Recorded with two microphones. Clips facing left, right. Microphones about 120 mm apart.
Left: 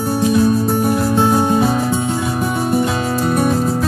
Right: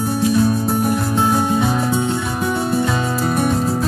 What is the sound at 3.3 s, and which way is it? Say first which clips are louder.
Music: left 2 dB; centre (ahead or behind).